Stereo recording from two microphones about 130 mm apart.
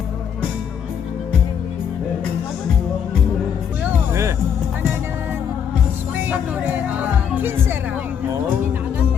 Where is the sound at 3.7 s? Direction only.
10° right (ahead or behind).